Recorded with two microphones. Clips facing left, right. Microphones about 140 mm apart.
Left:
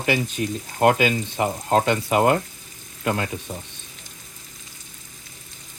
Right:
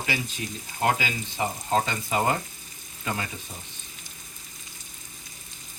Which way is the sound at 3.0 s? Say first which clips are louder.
Left 7 dB; 70° left (ahead or behind).